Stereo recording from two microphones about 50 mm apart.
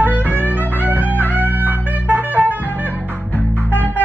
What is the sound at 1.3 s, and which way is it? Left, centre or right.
Music, right.